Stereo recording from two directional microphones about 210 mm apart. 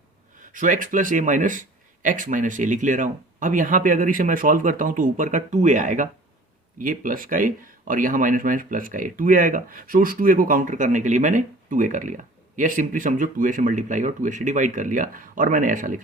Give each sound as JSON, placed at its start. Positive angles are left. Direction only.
{"t": 0.3, "sound": "speech", "side_deg": -40}